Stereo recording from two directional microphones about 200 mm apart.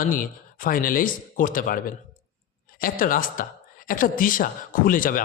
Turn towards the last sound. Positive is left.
turn(degrees=45)  # may be behind; listen again after turning